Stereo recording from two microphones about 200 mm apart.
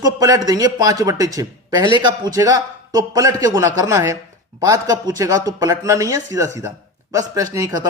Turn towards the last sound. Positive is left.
turn(degrees=-20)  # may be behind; listen again after turning